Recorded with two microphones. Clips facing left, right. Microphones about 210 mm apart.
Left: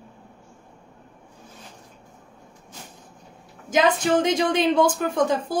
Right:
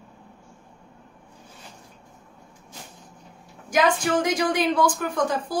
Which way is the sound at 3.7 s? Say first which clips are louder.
Left 2 dB; 20° left (ahead or behind).